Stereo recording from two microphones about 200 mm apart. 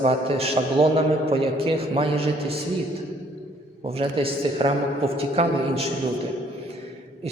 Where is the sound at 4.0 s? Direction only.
30° right (ahead or behind).